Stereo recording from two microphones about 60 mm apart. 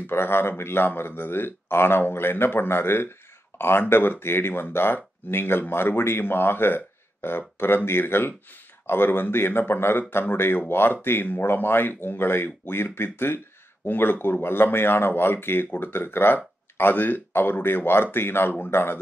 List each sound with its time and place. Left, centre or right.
0.0 s speech: left